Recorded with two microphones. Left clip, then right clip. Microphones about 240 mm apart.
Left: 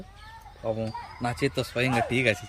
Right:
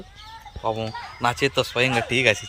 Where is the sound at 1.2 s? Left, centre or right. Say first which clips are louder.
Right 7 dB; centre.